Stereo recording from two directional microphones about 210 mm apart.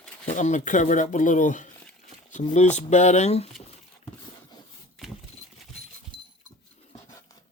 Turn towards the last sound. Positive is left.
turn(degrees=-20)  # may be behind; listen again after turning